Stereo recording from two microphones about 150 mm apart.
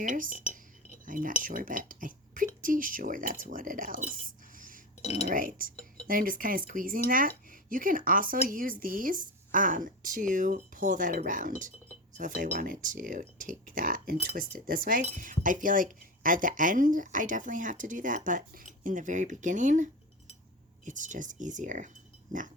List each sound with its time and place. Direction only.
0.0 s speech: 60° right (ahead or behind)
4.1 s a sound: 65° right (ahead or behind)
5.2 s speech: 65° right (ahead or behind)